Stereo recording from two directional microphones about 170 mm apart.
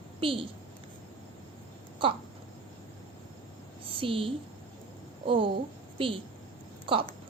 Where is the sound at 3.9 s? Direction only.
30° right (ahead or behind).